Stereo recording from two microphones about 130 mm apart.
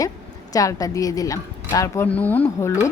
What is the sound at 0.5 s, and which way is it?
Speech, 25° left (ahead or behind).